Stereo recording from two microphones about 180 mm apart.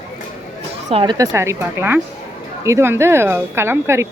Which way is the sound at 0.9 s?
30° right (ahead or behind).